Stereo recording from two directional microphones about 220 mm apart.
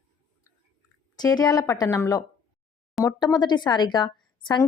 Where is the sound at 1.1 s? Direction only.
20° left (ahead or behind).